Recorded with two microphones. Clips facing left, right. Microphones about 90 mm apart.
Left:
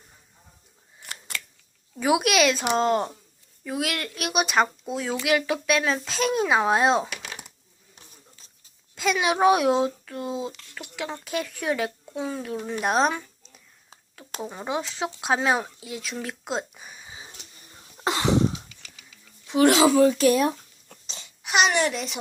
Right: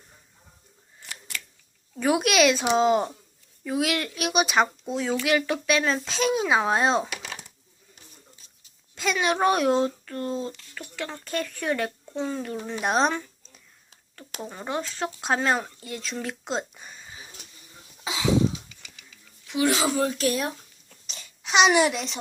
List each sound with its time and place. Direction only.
2.0 s speech: 5° left (ahead or behind)
9.0 s speech: 5° left (ahead or behind)
18.0 s a sound: 65° left (ahead or behind)
19.5 s speech: 30° left (ahead or behind)
21.1 s babbling: 25° left (ahead or behind)
21.4 s a sound: 5° left (ahead or behind)
21.7 s speech: 5° right (ahead or behind)